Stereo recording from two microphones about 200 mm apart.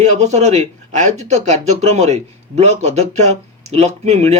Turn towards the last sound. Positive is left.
turn(degrees=-35)  # may be behind; listen again after turning